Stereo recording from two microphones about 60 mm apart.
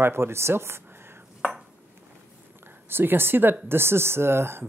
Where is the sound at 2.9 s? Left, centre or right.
Right.